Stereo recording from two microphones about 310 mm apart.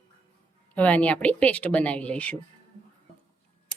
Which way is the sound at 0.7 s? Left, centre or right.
Centre.